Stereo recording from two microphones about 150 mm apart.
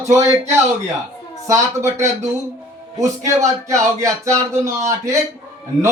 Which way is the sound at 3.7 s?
20° right (ahead or behind).